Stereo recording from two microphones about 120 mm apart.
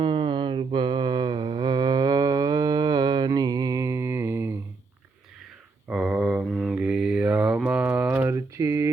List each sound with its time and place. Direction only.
0.0 s mantra: 45° right (ahead or behind); by 4.5 s 20° right (ahead or behind)
5.9 s mantra: 5° right (ahead or behind)
8.5 s mantra: 25° right (ahead or behind)